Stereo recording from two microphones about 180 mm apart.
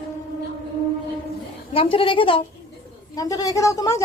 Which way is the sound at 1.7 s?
30° left (ahead or behind).